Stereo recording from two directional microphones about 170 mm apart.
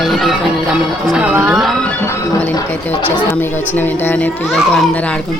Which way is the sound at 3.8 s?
10° left (ahead or behind).